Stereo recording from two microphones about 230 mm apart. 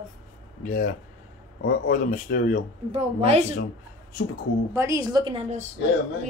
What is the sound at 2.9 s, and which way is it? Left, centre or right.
Speech, right.